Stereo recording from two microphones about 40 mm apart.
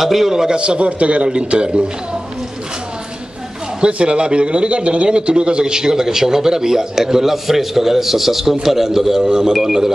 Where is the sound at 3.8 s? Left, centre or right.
Right.